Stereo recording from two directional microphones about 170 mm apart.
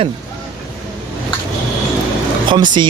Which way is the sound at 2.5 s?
25° right (ahead or behind).